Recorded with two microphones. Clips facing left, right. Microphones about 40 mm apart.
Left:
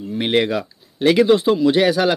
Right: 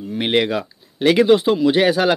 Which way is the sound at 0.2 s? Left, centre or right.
Right.